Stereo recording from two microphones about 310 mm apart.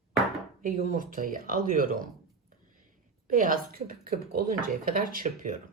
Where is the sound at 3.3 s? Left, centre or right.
Right.